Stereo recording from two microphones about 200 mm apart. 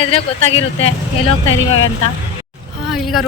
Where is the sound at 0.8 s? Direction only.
30° left (ahead or behind).